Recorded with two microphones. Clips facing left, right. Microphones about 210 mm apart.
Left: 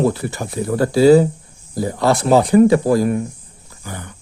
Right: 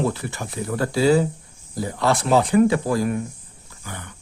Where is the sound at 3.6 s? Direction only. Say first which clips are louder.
Left 5 dB; 35° left (ahead or behind).